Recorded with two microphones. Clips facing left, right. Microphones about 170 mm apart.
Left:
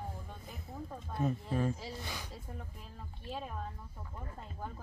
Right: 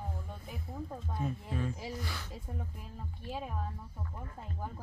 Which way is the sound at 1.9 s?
15° left (ahead or behind).